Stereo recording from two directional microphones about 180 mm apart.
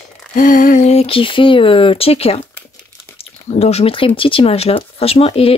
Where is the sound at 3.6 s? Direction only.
35° left (ahead or behind).